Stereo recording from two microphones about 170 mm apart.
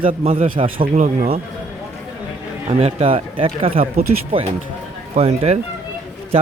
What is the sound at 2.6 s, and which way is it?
Speech, 35° right (ahead or behind).